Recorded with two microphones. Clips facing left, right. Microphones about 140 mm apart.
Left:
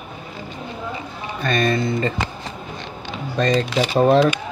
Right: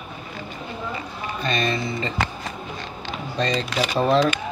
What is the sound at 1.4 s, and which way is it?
Speech, 50° left (ahead or behind).